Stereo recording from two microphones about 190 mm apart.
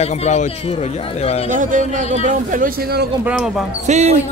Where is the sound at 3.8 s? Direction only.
35° right (ahead or behind).